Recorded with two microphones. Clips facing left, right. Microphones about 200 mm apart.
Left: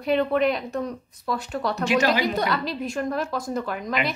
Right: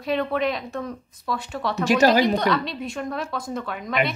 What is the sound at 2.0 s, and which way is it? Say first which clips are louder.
Speech: right 7 dB; 45° right (ahead or behind).